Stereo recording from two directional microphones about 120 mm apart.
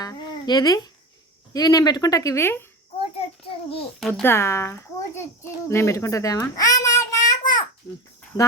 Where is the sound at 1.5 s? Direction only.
35° left (ahead or behind).